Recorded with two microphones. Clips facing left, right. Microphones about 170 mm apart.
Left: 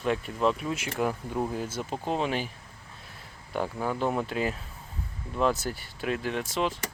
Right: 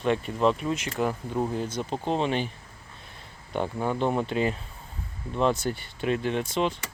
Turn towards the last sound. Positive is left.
turn(degrees=0)  # may be behind; listen again after turning